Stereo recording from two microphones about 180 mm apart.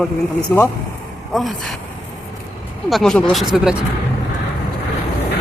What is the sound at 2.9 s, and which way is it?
Speech, centre (ahead or behind).